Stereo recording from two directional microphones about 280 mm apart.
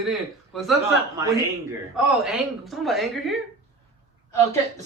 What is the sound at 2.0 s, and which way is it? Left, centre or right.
A man's voice, centre.